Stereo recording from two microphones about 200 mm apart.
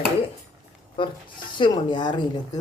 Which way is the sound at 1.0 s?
25° left (ahead or behind).